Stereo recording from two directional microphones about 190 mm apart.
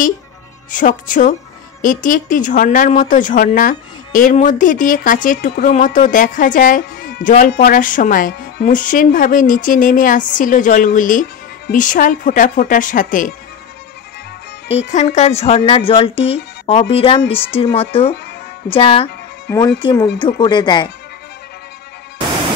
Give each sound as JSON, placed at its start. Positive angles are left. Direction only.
{"t": 0.7, "sound": "speech", "side_deg": 45}
{"t": 14.7, "sound": "speech", "side_deg": 35}